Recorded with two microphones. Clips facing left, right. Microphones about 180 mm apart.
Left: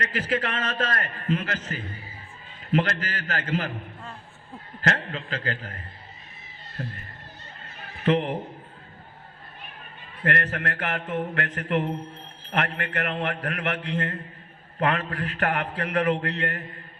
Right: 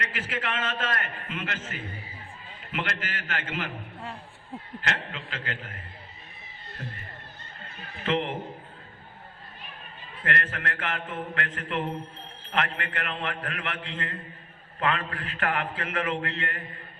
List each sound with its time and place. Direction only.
0.0 s a man's voice: 40° left (ahead or behind)
4.8 s a man's voice: 40° left (ahead or behind)
8.0 s a man's voice: 40° left (ahead or behind)
10.2 s a man's voice: 40° left (ahead or behind)